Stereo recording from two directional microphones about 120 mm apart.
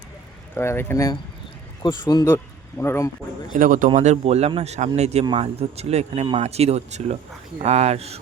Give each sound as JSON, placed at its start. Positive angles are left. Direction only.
{"t": 0.5, "sound": "speech", "side_deg": 20}
{"t": 1.8, "sound": "speech", "side_deg": 35}
{"t": 2.2, "sound": "speech", "side_deg": 20}
{"t": 3.5, "sound": "speech", "side_deg": -90}